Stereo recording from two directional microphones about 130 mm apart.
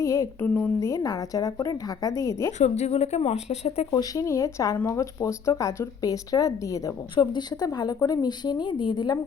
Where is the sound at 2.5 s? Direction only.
60° left (ahead or behind).